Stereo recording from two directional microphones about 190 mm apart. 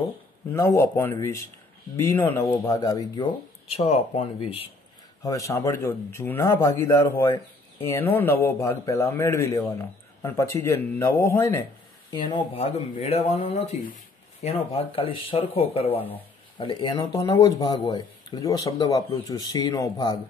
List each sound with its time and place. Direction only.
0.5 s a man's voice: 15° left (ahead or behind); by 4.6 s 30° left (ahead or behind)
5.2 s a man's voice: 15° left (ahead or behind)
12.1 s speech: 30° left (ahead or behind)
15.9 s a man's voice: 10° left (ahead or behind)
16.5 s speech: 25° left (ahead or behind)